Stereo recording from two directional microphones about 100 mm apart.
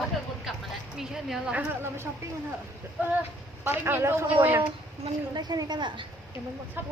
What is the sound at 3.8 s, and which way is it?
Speech, 25° right (ahead or behind).